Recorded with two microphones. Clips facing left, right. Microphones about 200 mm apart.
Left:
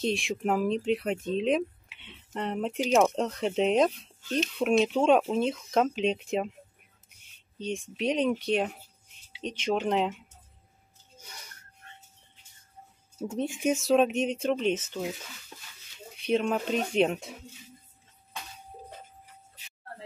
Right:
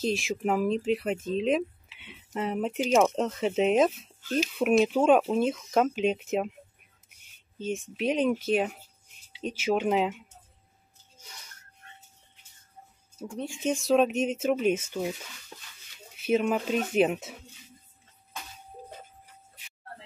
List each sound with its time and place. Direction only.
0.0 s speech: centre (ahead or behind)
7.5 s speech: 5° right (ahead or behind)
13.2 s speech: 25° left (ahead or behind)
13.7 s speech: centre (ahead or behind)
16.2 s speech: 5° right (ahead or behind)